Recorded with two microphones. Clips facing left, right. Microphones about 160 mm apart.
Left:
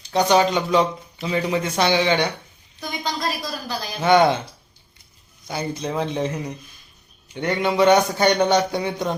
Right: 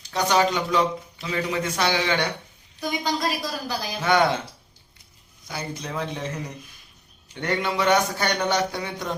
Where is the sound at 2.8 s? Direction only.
10° right (ahead or behind).